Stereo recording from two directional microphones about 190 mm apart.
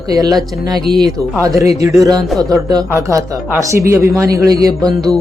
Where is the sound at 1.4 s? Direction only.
15° right (ahead or behind).